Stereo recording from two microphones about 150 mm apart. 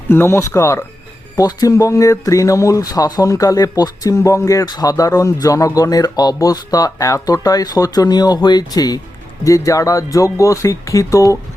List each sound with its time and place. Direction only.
0.1 s speech: 15° left (ahead or behind)